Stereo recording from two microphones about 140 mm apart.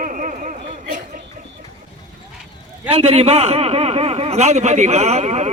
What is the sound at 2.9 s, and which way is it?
A man's voice, 45° right (ahead or behind).